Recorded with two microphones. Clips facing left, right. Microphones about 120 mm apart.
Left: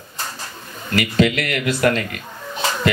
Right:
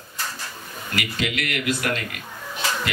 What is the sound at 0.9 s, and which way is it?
Speech, 40° left (ahead or behind).